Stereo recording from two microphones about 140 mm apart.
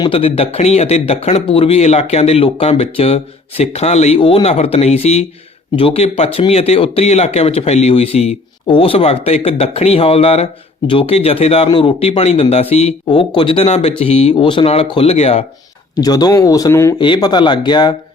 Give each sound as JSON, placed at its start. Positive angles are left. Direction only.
{"t": 0.0, "sound": "speech", "side_deg": 40}
{"t": 4.2, "sound": "speech", "side_deg": 40}
{"t": 13.1, "sound": "speech", "side_deg": 35}
{"t": 16.0, "sound": "speech", "side_deg": 30}